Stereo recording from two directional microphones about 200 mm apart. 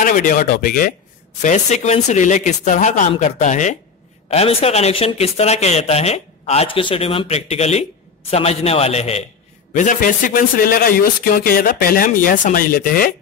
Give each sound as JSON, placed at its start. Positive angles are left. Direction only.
{"t": 0.0, "sound": "speech", "side_deg": 40}